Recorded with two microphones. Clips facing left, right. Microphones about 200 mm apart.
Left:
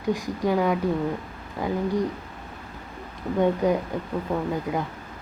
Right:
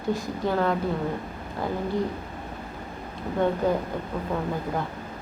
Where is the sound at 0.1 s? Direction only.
15° left (ahead or behind).